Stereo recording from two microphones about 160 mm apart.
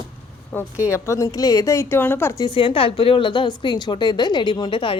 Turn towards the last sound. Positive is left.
turn(degrees=30)  # may be behind; listen again after turning